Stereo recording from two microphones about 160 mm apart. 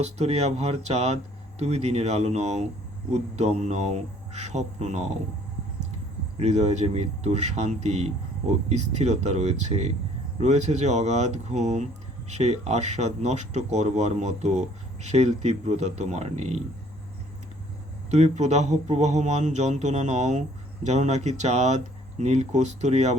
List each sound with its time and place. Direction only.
0.0 s speech: 45° right (ahead or behind)
6.3 s speech: 45° right (ahead or behind)
18.1 s speech: 45° right (ahead or behind)